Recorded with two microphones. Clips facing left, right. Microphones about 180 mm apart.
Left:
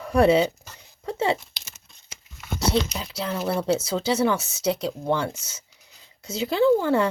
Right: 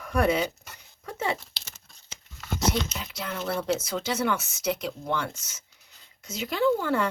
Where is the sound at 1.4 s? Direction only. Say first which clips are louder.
Even; 15° left (ahead or behind).